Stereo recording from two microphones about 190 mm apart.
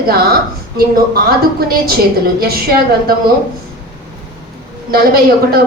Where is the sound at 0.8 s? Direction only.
55° right (ahead or behind).